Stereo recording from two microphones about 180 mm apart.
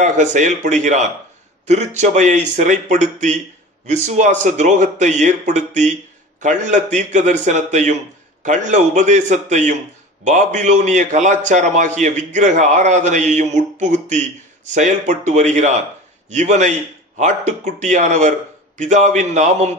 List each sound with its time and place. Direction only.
0.0 s a man's voice: 40° right (ahead or behind)